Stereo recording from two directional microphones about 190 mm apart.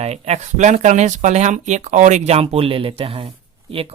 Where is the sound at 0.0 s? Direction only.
35° right (ahead or behind).